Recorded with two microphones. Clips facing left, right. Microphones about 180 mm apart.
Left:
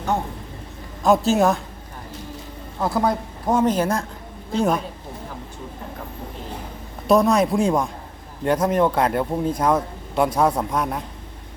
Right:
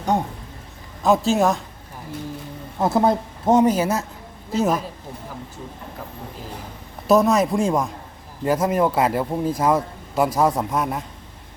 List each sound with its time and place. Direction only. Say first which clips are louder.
1.0 s speech: left 1 dB; centre (ahead or behind)
2.7 s speech: right 3 dB; 20° right (ahead or behind)
3.7 s speech: even; 5° right (ahead or behind)
7.1 s a man's voice: even; centre (ahead or behind)